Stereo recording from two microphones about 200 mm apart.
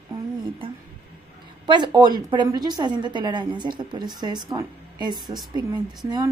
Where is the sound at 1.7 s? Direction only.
20° right (ahead or behind).